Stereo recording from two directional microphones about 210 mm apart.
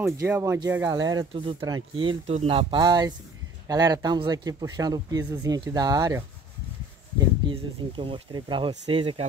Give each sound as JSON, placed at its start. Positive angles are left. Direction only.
{"t": 0.0, "sound": "speech", "side_deg": -10}